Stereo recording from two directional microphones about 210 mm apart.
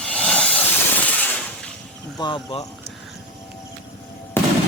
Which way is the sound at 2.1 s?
25° left (ahead or behind).